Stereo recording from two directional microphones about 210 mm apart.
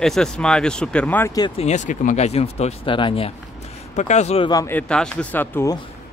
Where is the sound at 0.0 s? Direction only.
Centre (ahead or behind).